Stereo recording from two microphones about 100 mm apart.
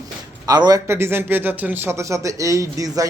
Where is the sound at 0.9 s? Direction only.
25° right (ahead or behind).